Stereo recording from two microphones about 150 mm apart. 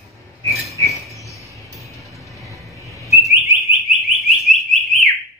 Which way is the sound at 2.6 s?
Centre (ahead or behind).